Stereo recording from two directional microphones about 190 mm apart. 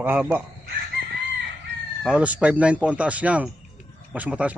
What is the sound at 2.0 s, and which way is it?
Speech, 5° right (ahead or behind).